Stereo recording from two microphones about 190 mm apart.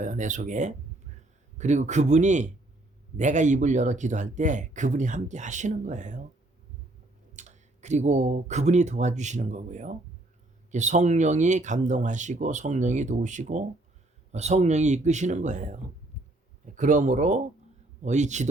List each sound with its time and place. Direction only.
0.0 s speech: 40° right (ahead or behind)
7.3 s speech: 40° right (ahead or behind)
16.1 s heart sounds: 40° right (ahead or behind)
16.7 s speech: 40° right (ahead or behind)